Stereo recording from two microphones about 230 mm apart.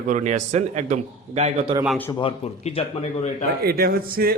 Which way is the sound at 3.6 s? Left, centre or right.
Right.